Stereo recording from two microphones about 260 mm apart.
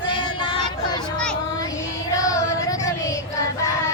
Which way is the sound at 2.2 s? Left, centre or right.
Centre.